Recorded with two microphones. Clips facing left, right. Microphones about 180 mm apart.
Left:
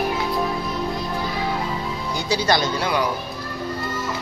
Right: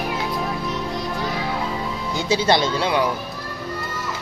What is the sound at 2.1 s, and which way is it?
Speech, 25° right (ahead or behind).